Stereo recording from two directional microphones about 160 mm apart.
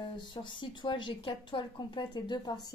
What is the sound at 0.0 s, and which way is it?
Speech, 30° left (ahead or behind).